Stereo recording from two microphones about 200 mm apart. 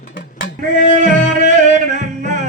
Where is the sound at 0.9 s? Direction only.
40° right (ahead or behind).